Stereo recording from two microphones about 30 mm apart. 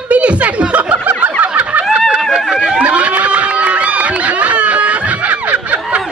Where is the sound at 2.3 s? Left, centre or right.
Right.